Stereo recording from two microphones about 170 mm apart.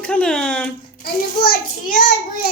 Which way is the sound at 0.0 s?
5° left (ahead or behind).